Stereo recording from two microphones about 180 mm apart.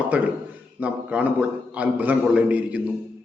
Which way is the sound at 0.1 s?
10° right (ahead or behind).